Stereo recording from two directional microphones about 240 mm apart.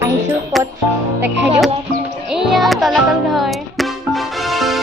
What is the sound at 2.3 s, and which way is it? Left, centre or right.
Music, centre.